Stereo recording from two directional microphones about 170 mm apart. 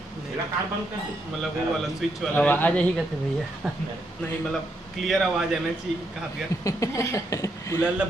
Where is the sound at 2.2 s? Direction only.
10° left (ahead or behind).